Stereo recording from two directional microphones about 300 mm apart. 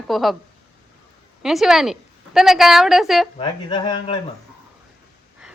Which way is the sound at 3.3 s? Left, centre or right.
Centre.